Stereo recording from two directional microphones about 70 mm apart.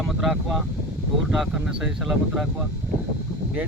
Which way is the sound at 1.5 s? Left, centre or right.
Centre.